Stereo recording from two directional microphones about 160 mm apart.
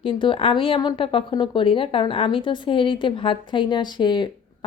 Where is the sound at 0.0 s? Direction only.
30° left (ahead or behind).